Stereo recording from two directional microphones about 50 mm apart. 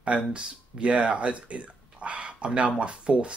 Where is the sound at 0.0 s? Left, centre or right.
Right.